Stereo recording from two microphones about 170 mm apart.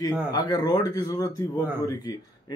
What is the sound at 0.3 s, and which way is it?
Speech, 25° left (ahead or behind).